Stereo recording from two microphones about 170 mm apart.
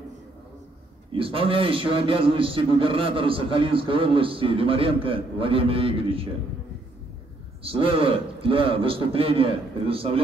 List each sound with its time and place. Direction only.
1.1 s a man's voice: 30° right (ahead or behind)
7.6 s a man's voice: 30° right (ahead or behind)